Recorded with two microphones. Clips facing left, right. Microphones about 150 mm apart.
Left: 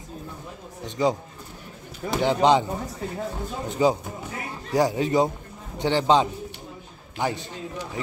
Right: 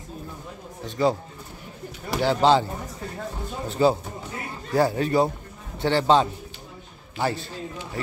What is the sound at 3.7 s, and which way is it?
A man's voice, 15° left (ahead or behind).